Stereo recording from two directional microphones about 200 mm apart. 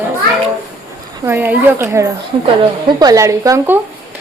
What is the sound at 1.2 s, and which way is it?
A woman's voice, 10° right (ahead or behind).